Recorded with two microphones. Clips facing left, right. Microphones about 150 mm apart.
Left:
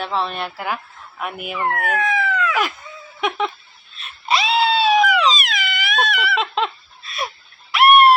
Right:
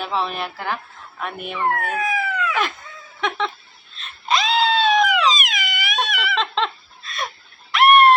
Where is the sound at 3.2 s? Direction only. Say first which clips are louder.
Left 2 dB; 10° left (ahead or behind).